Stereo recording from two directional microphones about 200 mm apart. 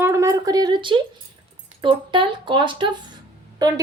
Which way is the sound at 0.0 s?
15° right (ahead or behind).